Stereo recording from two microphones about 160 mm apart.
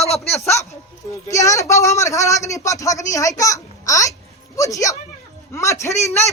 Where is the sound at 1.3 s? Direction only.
20° left (ahead or behind).